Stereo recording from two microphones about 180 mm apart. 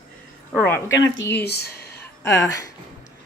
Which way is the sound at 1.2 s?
10° left (ahead or behind).